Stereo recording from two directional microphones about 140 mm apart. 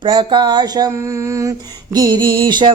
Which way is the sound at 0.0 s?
35° right (ahead or behind).